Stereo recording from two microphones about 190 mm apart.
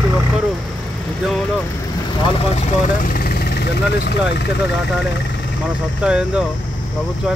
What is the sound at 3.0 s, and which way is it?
Vehicle, 50° left (ahead or behind).